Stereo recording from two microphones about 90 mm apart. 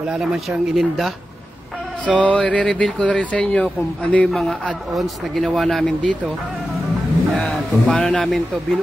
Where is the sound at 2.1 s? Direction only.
15° left (ahead or behind).